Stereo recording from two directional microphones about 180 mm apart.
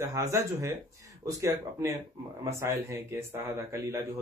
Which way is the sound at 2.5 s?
15° right (ahead or behind).